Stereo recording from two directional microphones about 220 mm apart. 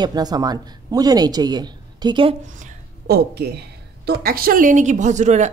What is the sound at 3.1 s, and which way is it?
A woman's voice, 45° right (ahead or behind).